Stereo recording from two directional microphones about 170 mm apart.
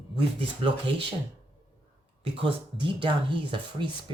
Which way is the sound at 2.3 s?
30° right (ahead or behind).